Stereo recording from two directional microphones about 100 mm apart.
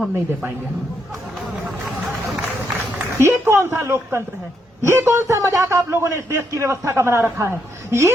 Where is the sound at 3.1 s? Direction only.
25° right (ahead or behind).